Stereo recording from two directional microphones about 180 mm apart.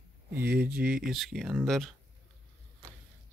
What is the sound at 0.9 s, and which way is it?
Speech, 5° right (ahead or behind).